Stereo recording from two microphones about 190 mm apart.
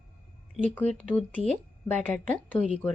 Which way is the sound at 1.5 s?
5° left (ahead or behind).